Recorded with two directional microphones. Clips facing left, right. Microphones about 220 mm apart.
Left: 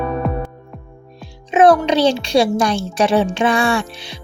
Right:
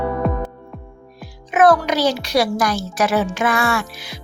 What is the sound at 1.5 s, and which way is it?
A child's voice, 25° left (ahead or behind).